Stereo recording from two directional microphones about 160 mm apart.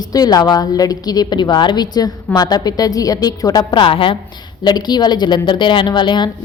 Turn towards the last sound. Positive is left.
turn(degrees=30)  # may be behind; listen again after turning